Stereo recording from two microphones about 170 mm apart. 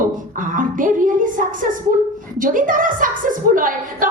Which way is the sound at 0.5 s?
50° right (ahead or behind).